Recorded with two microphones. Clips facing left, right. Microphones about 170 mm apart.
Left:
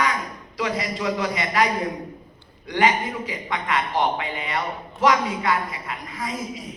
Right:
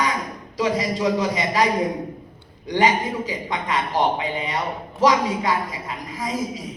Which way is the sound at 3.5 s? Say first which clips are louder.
Left 1 dB; 20° right (ahead or behind).